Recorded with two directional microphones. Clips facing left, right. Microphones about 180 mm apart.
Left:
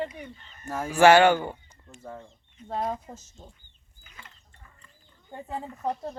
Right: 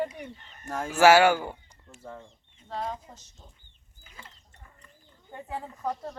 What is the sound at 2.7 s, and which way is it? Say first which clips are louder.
Speech: left 4 dB; 50° left (ahead or behind).